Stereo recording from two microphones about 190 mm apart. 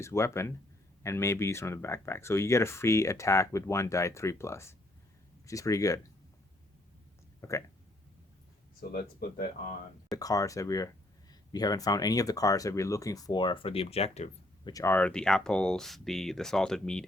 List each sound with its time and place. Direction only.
0.0 s speech: 15° left (ahead or behind)
7.4 s speech: 15° left (ahead or behind)
8.9 s speech: 50° left (ahead or behind)
10.1 s speech: 20° left (ahead or behind); by 14.7 s 35° left (ahead or behind)
14.7 s speech: 15° left (ahead or behind)